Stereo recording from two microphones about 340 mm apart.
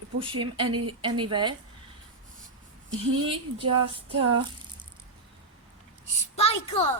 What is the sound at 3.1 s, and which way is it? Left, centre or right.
Speech, centre.